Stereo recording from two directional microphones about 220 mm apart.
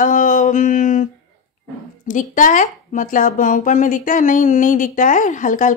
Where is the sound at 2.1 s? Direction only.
35° left (ahead or behind).